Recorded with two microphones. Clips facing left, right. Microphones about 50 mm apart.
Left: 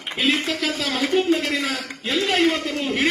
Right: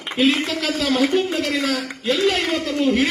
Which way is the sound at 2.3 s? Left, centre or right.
Centre.